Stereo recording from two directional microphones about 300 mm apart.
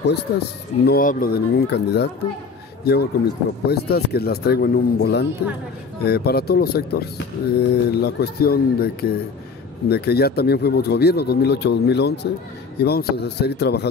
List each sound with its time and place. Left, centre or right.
0.3 s a man's voice: left